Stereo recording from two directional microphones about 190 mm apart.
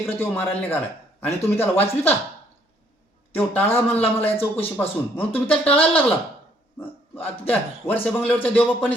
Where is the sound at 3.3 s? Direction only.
10° left (ahead or behind).